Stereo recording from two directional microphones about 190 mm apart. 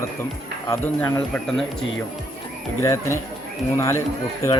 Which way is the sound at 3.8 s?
15° left (ahead or behind).